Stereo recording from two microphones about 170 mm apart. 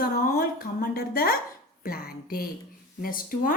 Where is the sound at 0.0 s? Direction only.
60° left (ahead or behind).